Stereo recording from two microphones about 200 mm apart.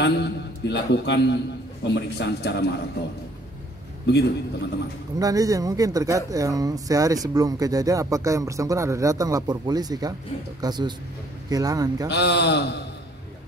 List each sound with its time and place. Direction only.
0.0 s a man's voice: 60° left (ahead or behind)
4.0 s a man's voice: 60° left (ahead or behind)
5.2 s speech: 15° right (ahead or behind)
12.1 s a man's voice: 60° left (ahead or behind)